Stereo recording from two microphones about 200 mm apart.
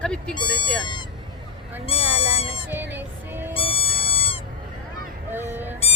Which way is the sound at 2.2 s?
90° right.